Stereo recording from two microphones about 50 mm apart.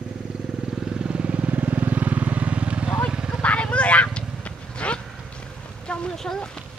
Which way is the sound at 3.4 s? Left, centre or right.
Left.